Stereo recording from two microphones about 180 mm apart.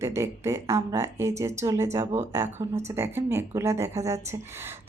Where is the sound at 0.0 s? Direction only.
15° right (ahead or behind).